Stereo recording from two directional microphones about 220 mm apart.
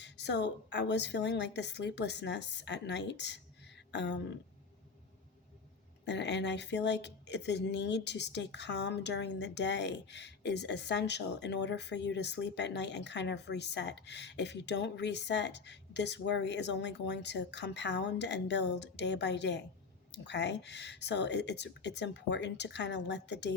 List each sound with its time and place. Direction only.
0.0 s speech: 50° left (ahead or behind)
6.1 s speech: 50° left (ahead or behind)